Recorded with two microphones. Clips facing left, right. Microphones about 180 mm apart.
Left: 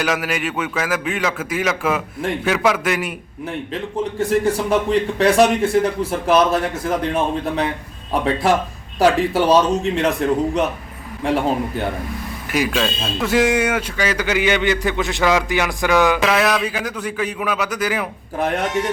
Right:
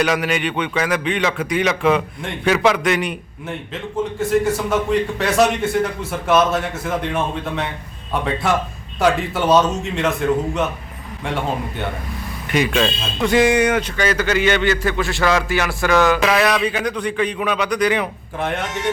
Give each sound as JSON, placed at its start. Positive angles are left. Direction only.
{"t": 0.0, "sound": "a man's voice", "side_deg": 5}
{"t": 4.2, "sound": "speech", "side_deg": 30}
{"t": 12.5, "sound": "speech", "side_deg": 5}
{"t": 16.2, "sound": "a man's voice", "side_deg": 0}
{"t": 18.3, "sound": "speech", "side_deg": 40}